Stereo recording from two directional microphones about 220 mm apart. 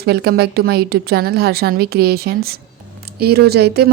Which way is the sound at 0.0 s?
45° right (ahead or behind).